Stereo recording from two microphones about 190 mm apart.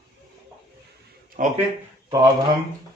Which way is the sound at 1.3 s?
50° right (ahead or behind).